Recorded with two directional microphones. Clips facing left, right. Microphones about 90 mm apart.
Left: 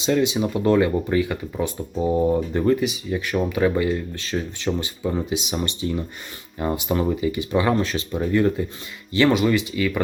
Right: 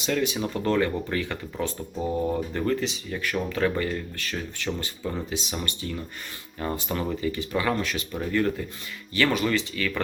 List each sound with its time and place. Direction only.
0.0 s speech: 20° left (ahead or behind)
4.2 s speech: 20° left (ahead or behind)